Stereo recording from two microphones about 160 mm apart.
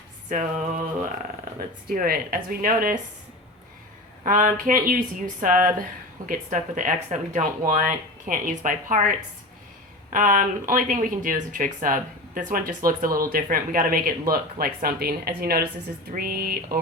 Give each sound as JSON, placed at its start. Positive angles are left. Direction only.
{"t": 0.3, "sound": "a sound", "side_deg": -50}
{"t": 1.5, "sound": "speech", "side_deg": -65}
{"t": 4.2, "sound": "speech", "side_deg": -60}